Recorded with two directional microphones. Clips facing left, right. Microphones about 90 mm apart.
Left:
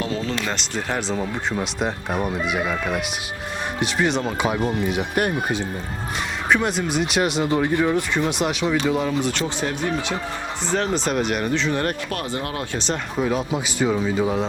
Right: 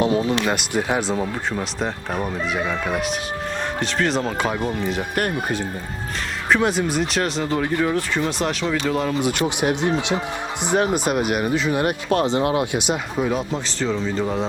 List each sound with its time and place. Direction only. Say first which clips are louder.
0.0 s speech: right 6 dB; 15° right (ahead or behind)
1.5 s speech: left 1 dB; 5° left (ahead or behind)
9.2 s speech: right 4 dB; 15° right (ahead or behind)
12.0 s speech: right 8 dB; 25° right (ahead or behind); by 13.6 s centre (ahead or behind)
13.7 s speech: left 2 dB; 10° left (ahead or behind)